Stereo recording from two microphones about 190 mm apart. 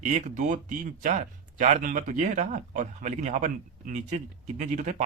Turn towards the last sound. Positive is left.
turn(degrees=-40)  # may be behind; listen again after turning